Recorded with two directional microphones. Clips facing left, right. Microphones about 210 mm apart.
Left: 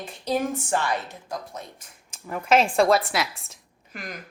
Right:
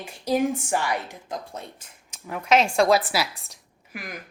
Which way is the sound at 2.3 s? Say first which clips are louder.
Even; 5° left (ahead or behind).